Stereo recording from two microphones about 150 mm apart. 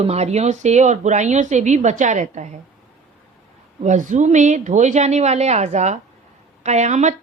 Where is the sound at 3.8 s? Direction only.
55° right (ahead or behind).